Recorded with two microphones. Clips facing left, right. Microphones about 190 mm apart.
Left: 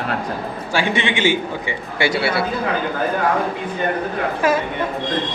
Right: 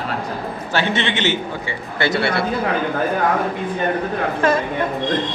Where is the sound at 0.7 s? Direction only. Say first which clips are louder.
Left 1 dB; 10° left (ahead or behind).